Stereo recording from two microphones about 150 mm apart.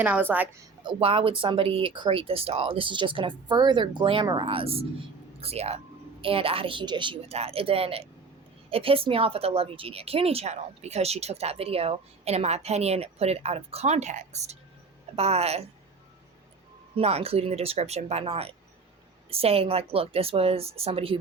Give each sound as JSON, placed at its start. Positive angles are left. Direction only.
{"t": 0.0, "sound": "a woman's voice", "side_deg": -10}
{"t": 0.9, "sound": "a woman's voice", "side_deg": -35}
{"t": 16.9, "sound": "a woman's voice", "side_deg": -45}